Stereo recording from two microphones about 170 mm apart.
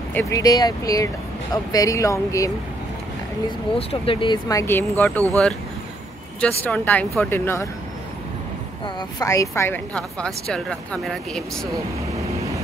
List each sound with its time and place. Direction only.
0.1 s speech: 15° left (ahead or behind)
3.4 s speech: 35° left (ahead or behind); by 5.2 s 15° left (ahead or behind)
6.6 s a woman's voice: 10° left (ahead or behind)
8.8 s a woman's voice: 20° left (ahead or behind); by 11.7 s 5° left (ahead or behind)